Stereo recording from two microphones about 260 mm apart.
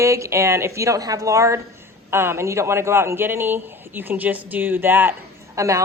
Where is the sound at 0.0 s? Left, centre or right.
Centre.